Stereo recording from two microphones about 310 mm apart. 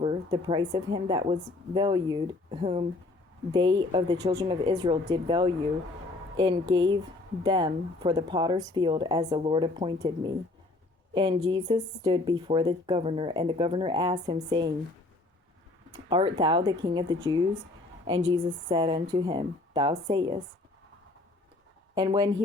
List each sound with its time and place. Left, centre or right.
0.0 s speech: centre
16.0 s speech: centre
18.2 s a woman's voice: right
18.7 s speech: centre
21.9 s speech: centre